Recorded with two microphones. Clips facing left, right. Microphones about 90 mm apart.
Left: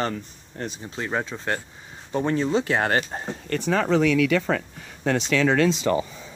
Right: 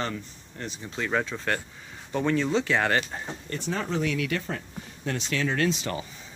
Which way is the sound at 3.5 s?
90° left.